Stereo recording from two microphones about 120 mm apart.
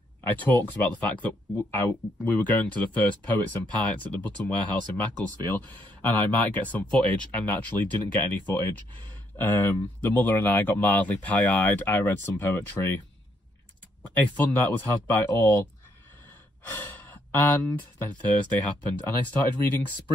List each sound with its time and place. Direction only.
0.2 s speech: 15° left (ahead or behind)
10.0 s speech: 15° left (ahead or behind)
14.0 s speech: 15° left (ahead or behind)